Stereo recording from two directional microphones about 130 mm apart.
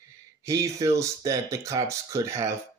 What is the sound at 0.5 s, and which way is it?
Speech, 25° right (ahead or behind).